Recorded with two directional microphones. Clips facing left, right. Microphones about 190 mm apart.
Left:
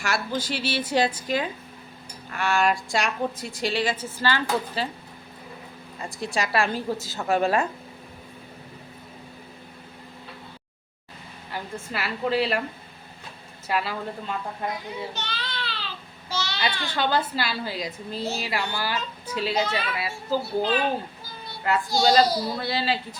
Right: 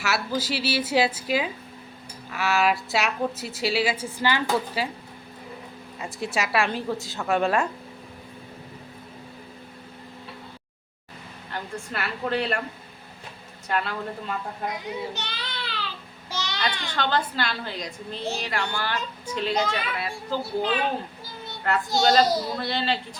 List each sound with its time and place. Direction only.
0.0 s a woman's voice: 5° right (ahead or behind)
6.1 s a woman's voice: 5° right (ahead or behind)
11.5 s a woman's voice: 5° left (ahead or behind)
13.7 s a woman's voice: 5° left (ahead or behind)
15.1 s baby cry: 15° right (ahead or behind)
16.3 s babbling: 15° right (ahead or behind)
16.6 s a child's voice: 10° left (ahead or behind)
21.7 s a woman's voice: centre (ahead or behind)